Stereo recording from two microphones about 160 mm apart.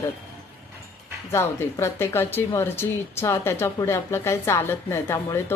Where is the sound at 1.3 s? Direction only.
15° left (ahead or behind).